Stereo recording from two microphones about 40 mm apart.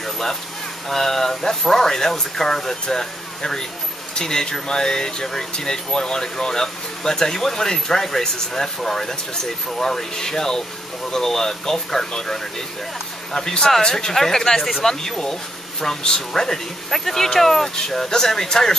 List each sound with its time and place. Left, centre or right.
0.0 s speech: centre